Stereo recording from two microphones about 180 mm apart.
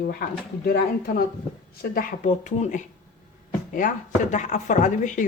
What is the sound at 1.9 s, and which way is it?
Speech, 50° left (ahead or behind).